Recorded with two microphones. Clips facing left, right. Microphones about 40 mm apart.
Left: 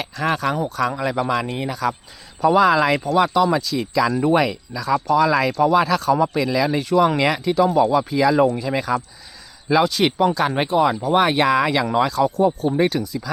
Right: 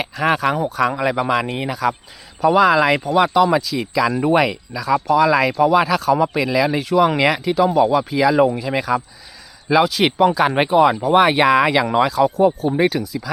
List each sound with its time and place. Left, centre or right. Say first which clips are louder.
0.3 s speech: right 3 dB; centre
1.7 s speech: right 3 dB; centre